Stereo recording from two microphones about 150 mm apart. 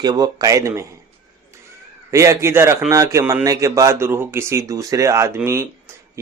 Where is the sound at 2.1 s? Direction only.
20° right (ahead or behind).